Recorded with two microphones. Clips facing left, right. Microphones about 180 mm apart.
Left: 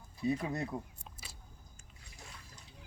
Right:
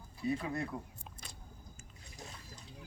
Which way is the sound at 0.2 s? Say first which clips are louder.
Left 2 dB; 20° left (ahead or behind).